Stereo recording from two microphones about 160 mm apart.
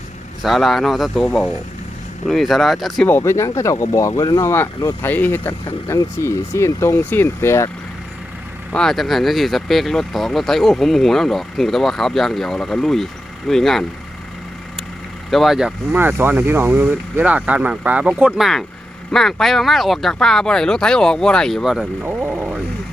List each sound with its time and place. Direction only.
0.4 s speech: centre (ahead or behind)
3.1 s speech: 15° left (ahead or behind)
8.7 s speech: 5° left (ahead or behind)
15.3 s speech: centre (ahead or behind)
22.0 s speech: 10° right (ahead or behind)